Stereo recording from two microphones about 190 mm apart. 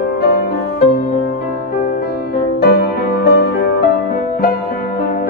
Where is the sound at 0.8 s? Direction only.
45° left (ahead or behind).